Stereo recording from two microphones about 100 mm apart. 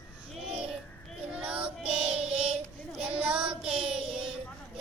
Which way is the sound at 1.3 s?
10° right (ahead or behind).